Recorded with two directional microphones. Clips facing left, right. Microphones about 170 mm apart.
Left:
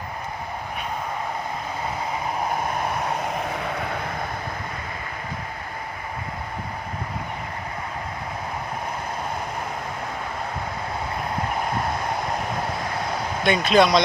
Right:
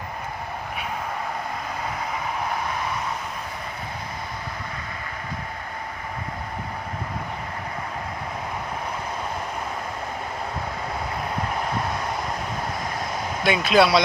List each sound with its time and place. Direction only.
3.5 s vehicle: 70° left (ahead or behind)
13.4 s speech: 5° right (ahead or behind)